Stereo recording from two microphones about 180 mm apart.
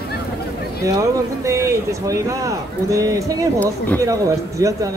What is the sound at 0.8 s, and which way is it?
Speech, 15° right (ahead or behind).